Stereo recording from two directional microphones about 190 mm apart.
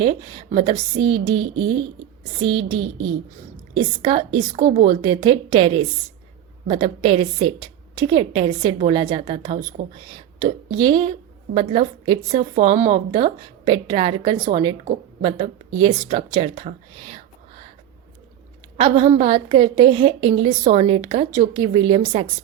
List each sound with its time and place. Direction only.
0.0 s a woman's voice: 25° right (ahead or behind)
4.5 s speech: 40° right (ahead or behind)
4.9 s a woman's voice: 25° right (ahead or behind)
12.9 s a woman's voice: 25° right (ahead or behind)
17.0 s whispering: 30° right (ahead or behind)
18.8 s a woman's voice: 30° right (ahead or behind)